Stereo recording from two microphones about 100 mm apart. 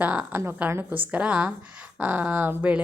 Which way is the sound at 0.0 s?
15° right (ahead or behind).